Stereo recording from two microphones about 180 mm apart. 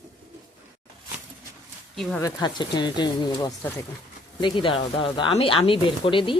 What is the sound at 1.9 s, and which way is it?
Speech, centre (ahead or behind).